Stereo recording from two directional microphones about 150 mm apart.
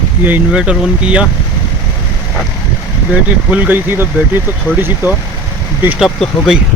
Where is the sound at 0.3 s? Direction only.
10° right (ahead or behind).